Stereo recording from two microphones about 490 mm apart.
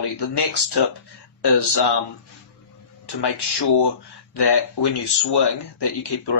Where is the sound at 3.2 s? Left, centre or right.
Left.